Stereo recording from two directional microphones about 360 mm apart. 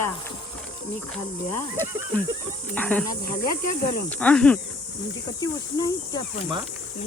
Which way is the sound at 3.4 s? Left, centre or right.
Left.